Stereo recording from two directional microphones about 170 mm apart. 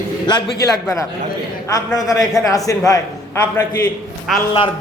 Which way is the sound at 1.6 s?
20° left (ahead or behind).